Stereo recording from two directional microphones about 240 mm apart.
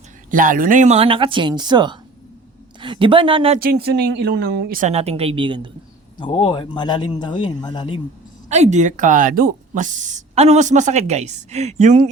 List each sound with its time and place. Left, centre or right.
0.3 s speech: right
3.6 s speech: right
6.1 s a man's voice: left
8.4 s speech: right